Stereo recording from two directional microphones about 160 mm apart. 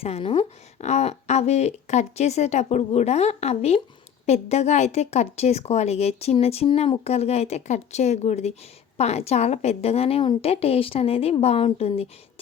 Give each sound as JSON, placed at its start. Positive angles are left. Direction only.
{"t": 0.0, "sound": "a woman's voice", "side_deg": 40}